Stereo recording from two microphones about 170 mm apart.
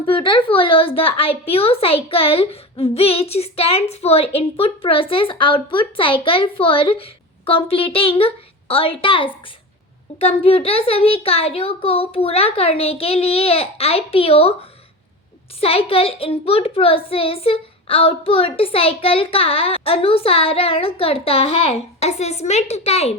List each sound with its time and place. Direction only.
0.0 s a woman's voice: 30° left (ahead or behind)
15.6 s a woman's voice: 35° left (ahead or behind)